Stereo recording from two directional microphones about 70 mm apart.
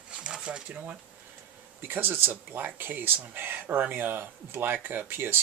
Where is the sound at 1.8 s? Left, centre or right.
Right.